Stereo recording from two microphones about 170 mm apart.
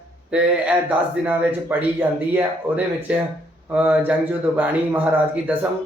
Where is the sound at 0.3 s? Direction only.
5° right (ahead or behind).